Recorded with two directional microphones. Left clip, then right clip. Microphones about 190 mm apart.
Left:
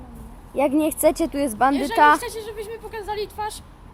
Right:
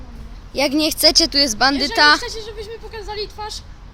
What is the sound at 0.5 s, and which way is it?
Speech, 10° right (ahead or behind).